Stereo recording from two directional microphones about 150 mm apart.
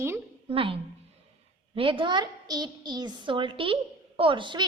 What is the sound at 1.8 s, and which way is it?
A woman's voice, 35° right (ahead or behind).